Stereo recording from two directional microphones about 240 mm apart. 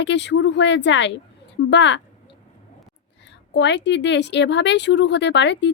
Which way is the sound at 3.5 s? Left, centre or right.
Left.